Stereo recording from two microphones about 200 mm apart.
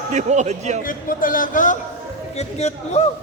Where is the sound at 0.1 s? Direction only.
35° right (ahead or behind).